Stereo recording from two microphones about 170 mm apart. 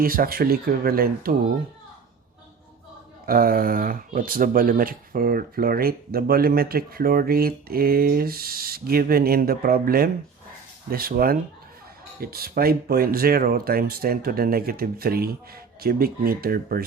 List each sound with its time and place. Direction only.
0.0 s speech: 60° right (ahead or behind)
3.2 s speech: 60° right (ahead or behind)